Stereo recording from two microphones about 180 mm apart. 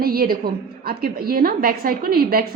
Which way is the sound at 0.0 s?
55° right (ahead or behind).